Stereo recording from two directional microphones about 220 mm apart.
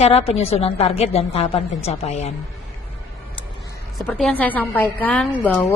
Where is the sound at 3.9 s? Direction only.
Centre (ahead or behind).